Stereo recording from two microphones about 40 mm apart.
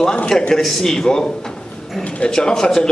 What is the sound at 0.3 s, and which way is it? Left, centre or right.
Speech, left.